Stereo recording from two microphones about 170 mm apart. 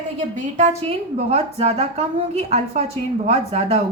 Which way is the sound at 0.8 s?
35° right (ahead or behind).